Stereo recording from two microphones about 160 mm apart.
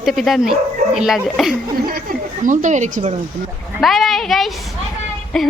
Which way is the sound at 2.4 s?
50° right (ahead or behind).